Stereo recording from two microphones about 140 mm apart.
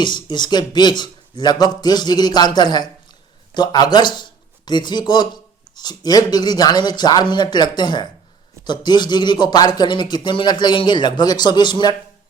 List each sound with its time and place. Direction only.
0.0 s speech: 35° left (ahead or behind)